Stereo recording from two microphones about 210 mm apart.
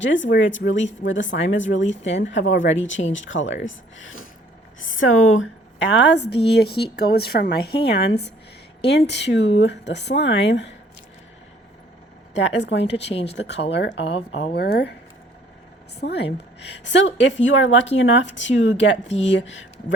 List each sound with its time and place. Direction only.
0.0 s a woman's voice: 60° left (ahead or behind)
12.3 s a woman's voice: 60° left (ahead or behind)
14.2 s speech: 25° left (ahead or behind)
14.5 s a woman's voice: 50° left (ahead or behind)
16.0 s a woman's voice: 55° left (ahead or behind)
19.0 s speech: 30° left (ahead or behind)
19.3 s a woman's voice: 60° left (ahead or behind)